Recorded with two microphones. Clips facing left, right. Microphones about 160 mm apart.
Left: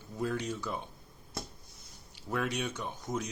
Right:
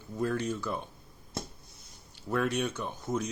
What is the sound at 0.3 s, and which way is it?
Speech, 15° left (ahead or behind).